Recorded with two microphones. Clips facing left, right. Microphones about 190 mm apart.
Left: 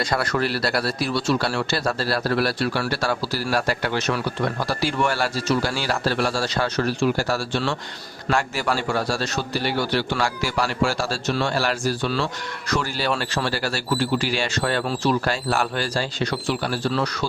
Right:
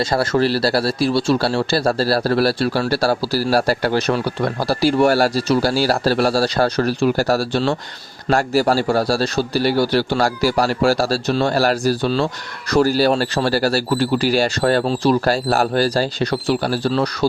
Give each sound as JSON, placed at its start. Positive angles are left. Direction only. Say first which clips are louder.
{"t": 0.0, "sound": "speech", "louder": "right 6 dB", "side_deg": -25}